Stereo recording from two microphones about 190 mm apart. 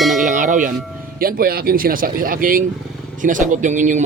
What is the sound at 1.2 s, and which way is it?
Speech, 50° right (ahead or behind).